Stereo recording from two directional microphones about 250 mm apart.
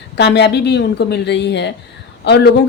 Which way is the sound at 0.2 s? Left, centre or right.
Left.